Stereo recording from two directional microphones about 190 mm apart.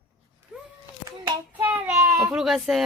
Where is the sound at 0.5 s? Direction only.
5° right (ahead or behind).